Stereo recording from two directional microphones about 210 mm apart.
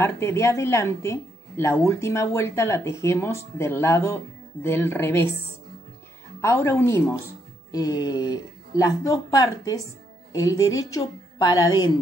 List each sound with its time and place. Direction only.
0.0 s a woman's voice: 10° left (ahead or behind)
6.4 s a woman's voice: 10° left (ahead or behind)